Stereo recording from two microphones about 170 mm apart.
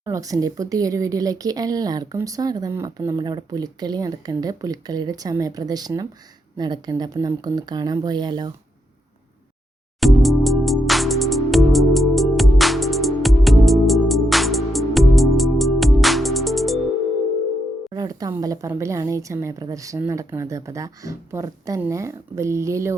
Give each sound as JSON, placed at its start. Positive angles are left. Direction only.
{"t": 0.0, "sound": "a woman's voice", "side_deg": -20}
{"t": 10.0, "sound": "music", "side_deg": 0}
{"t": 17.9, "sound": "a woman's voice", "side_deg": -20}